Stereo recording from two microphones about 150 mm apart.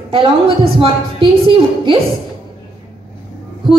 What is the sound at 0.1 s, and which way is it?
A woman's voice, 35° right (ahead or behind).